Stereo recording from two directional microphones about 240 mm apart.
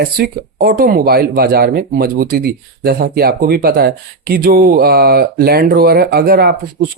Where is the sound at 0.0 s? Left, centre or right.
Right.